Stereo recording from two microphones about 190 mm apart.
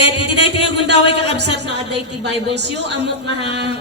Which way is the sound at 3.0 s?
30° left (ahead or behind).